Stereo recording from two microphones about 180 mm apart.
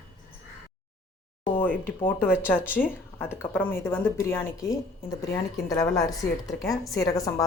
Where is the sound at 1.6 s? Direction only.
10° left (ahead or behind).